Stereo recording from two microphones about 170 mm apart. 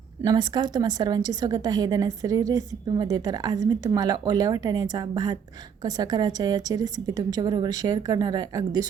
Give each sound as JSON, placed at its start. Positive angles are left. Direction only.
{"t": 0.3, "sound": "a woman's voice", "side_deg": -25}